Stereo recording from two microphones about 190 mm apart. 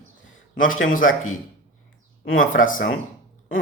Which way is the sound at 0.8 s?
45° left (ahead or behind).